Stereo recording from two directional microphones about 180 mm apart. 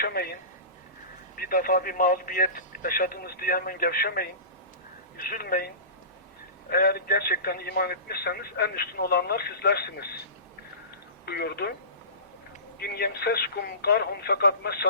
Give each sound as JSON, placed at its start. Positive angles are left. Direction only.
{"t": 0.0, "sound": "speech", "side_deg": 55}
{"t": 1.4, "sound": "speech", "side_deg": 55}
{"t": 11.3, "sound": "speech", "side_deg": 65}
{"t": 12.8, "sound": "speech", "side_deg": 60}